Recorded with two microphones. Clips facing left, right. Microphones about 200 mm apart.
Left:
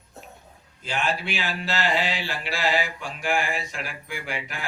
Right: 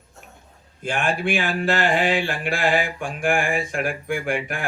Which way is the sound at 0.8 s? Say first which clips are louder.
Right 5 dB; 50° right (ahead or behind).